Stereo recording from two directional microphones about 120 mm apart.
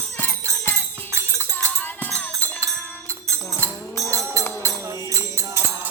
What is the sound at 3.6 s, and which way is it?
Music, 25° right (ahead or behind).